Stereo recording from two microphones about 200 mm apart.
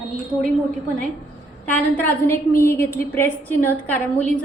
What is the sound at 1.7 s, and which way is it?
A woman's voice, 10° left (ahead or behind).